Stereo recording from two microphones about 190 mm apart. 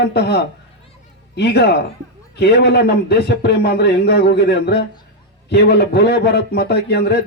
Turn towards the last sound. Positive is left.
turn(degrees=60)  # may be behind; listen again after turning